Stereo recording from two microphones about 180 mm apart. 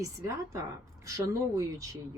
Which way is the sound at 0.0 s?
15° right (ahead or behind).